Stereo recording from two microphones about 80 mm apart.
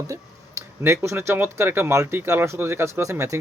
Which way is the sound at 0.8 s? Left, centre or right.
Right.